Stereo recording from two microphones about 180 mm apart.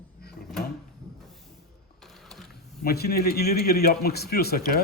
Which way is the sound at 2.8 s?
60° left (ahead or behind).